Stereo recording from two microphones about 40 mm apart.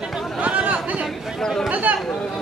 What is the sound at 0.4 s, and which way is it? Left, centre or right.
Chatter, right.